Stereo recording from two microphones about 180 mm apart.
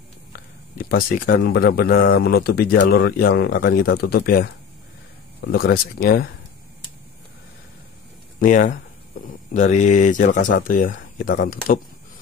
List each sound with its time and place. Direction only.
0.7 s speech: 50° left (ahead or behind)
8.4 s speech: 45° left (ahead or behind)